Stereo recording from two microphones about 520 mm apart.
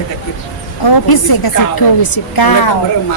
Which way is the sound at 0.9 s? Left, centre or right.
Left.